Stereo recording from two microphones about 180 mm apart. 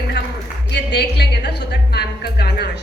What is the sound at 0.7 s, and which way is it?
A woman's voice, 65° left (ahead or behind).